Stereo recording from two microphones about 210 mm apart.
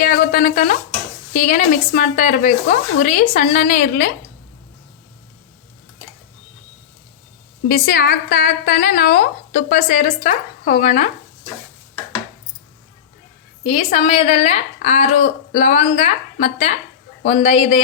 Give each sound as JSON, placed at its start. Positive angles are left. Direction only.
{"t": 0.0, "sound": "speech", "side_deg": 40}
{"t": 7.7, "sound": "a woman's voice", "side_deg": 45}
{"t": 13.7, "sound": "speech", "side_deg": 30}